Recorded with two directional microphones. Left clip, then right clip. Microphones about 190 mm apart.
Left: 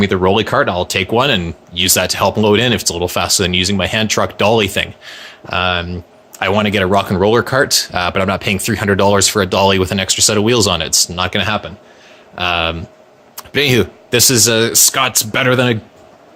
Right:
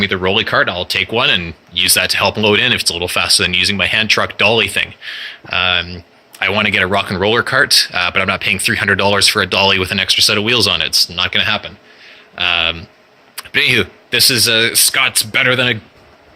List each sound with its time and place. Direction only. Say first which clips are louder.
0.0 s speech: left 1 dB; 35° left (ahead or behind)
6.4 s speech: right 1 dB; 25° left (ahead or behind)
13.5 s speech: right 1 dB; 25° left (ahead or behind)
14.1 s speech: right 1 dB; 35° left (ahead or behind)